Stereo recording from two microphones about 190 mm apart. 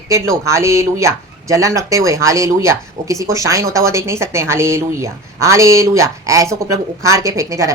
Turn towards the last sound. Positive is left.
turn(degrees=-15)  # may be behind; listen again after turning